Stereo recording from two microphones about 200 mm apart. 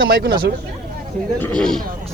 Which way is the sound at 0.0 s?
55° right (ahead or behind).